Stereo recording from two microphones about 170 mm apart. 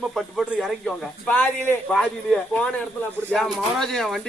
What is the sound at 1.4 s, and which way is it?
A man's voice, 10° left (ahead or behind).